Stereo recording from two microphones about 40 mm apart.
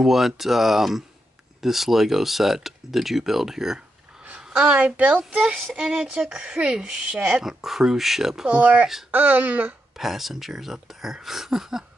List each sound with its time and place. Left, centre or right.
0.0 s speech: centre
4.4 s a sound: right
4.6 s a woman's voice: right
5.8 s speech: centre
7.2 s speech: centre
8.5 s a woman's voice: right
9.1 s speech: right
9.9 s speech: centre